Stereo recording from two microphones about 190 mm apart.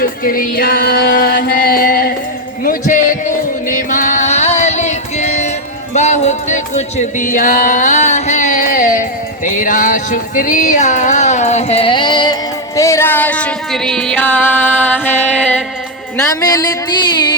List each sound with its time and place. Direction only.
0.0 s music: 50° left (ahead or behind); by 15.5 s 5° left (ahead or behind)
16.1 s speech: 20° left (ahead or behind)